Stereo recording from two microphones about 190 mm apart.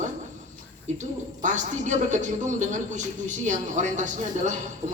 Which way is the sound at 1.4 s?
40° right (ahead or behind).